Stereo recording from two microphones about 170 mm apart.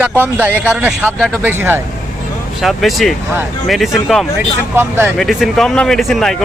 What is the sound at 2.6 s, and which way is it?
Speech, centre (ahead or behind).